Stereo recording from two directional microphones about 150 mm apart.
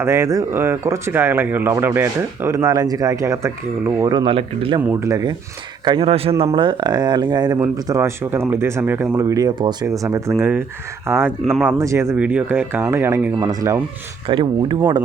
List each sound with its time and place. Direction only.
0.0 s speech: 20° right (ahead or behind)
4.1 s speech: 35° right (ahead or behind)
4.8 s speech: 15° right (ahead or behind)
5.8 s speech: 35° right (ahead or behind); by 11.3 s 15° right (ahead or behind)
11.3 s speech: centre (ahead or behind)
11.6 s speech: 20° right (ahead or behind)